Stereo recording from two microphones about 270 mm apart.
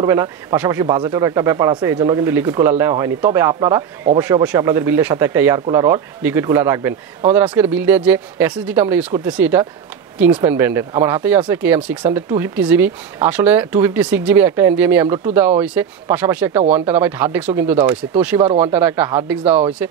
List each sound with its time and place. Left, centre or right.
0.0 s speech: centre